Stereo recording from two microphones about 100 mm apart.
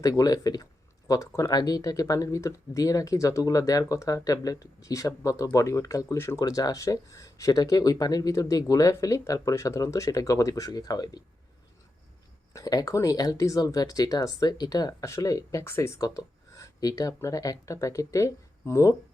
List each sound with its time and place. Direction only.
0.0 s speech: 35° left (ahead or behind)
12.5 s speech: 35° left (ahead or behind)
16.0 s speech: 35° left (ahead or behind)